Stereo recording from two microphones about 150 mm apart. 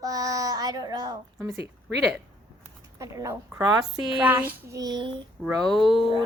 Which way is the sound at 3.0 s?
20° right (ahead or behind).